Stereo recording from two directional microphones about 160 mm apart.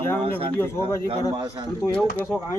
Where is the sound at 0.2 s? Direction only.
35° right (ahead or behind).